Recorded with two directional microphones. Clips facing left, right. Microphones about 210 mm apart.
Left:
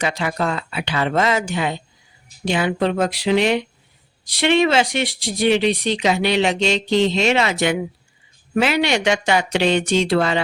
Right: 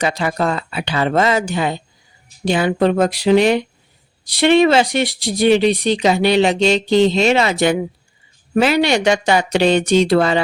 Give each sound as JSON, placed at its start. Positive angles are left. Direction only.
{"t": 0.0, "sound": "speech", "side_deg": -35}